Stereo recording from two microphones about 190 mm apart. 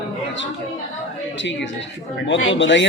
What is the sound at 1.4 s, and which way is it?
Speech, 70° left (ahead or behind).